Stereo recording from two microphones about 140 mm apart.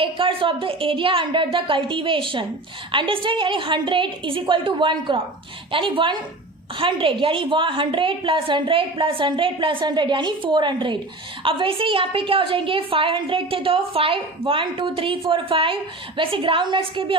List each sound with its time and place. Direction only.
0.0 s a woman's voice: 40° right (ahead or behind)